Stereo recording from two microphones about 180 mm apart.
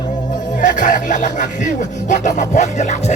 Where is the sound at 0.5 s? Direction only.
45° left (ahead or behind).